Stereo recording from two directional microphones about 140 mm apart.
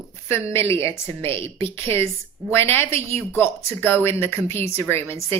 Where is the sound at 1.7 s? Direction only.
15° left (ahead or behind).